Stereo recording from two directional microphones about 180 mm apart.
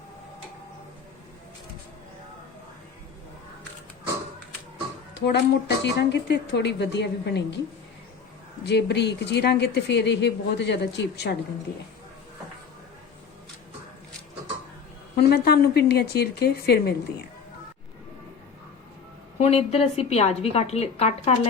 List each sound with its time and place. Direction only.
5.1 s a woman's voice: 70° left (ahead or behind)
8.6 s a woman's voice: 70° left (ahead or behind)
15.1 s a woman's voice: 60° left (ahead or behind)
19.4 s a woman's voice: 35° left (ahead or behind)